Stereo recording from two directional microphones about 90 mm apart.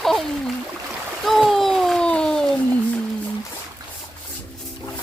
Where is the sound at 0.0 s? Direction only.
5° left (ahead or behind).